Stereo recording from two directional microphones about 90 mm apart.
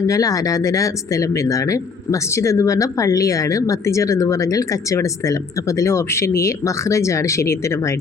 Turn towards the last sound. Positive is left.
turn(degrees=30)  # may be behind; listen again after turning